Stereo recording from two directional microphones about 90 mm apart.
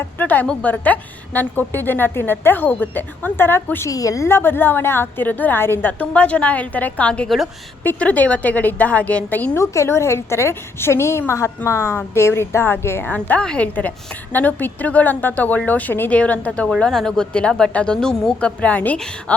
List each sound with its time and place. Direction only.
0.0 s a woman's voice: 20° left (ahead or behind)
3.8 s a woman's voice: 40° left (ahead or behind); by 9.5 s 15° left (ahead or behind)
9.6 s a woman's voice: 30° left (ahead or behind)